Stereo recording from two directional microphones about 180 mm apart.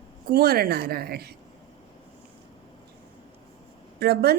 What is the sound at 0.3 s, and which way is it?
Speech, 60° right (ahead or behind).